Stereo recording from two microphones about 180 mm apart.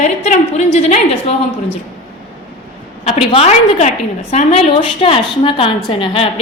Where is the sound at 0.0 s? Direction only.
40° left (ahead or behind).